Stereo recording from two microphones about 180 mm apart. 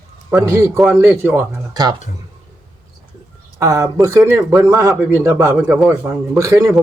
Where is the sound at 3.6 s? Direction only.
15° right (ahead or behind).